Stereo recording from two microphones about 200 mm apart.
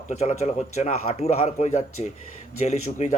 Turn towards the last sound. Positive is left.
turn(degrees=35)  # may be behind; listen again after turning